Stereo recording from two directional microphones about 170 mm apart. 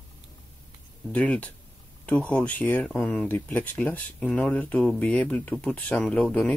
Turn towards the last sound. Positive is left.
turn(degrees=5)  # may be behind; listen again after turning